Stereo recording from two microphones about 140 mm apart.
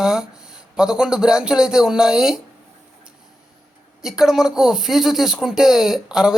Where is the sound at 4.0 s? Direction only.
5° right (ahead or behind).